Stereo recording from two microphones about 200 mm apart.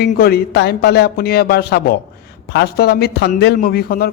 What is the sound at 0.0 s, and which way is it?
A man's voice, 50° left (ahead or behind).